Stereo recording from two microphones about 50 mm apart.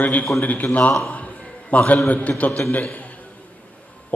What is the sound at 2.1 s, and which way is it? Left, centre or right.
Speech, left.